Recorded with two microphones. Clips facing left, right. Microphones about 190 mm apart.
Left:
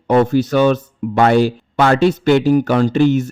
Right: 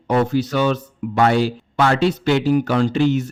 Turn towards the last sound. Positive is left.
turn(degrees=45)  # may be behind; listen again after turning